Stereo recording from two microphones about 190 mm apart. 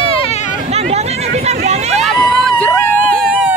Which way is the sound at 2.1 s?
Centre (ahead or behind).